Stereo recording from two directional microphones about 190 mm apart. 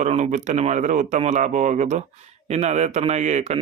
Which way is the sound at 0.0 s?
40° right (ahead or behind).